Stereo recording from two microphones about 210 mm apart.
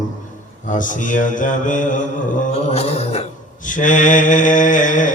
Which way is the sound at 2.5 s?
30° left (ahead or behind).